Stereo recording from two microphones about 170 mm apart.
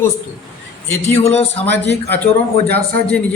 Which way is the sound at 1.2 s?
40° left (ahead or behind).